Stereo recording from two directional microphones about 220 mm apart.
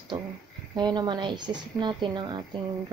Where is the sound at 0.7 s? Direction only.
20° right (ahead or behind).